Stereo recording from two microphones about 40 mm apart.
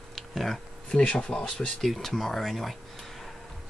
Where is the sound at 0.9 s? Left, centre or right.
Left.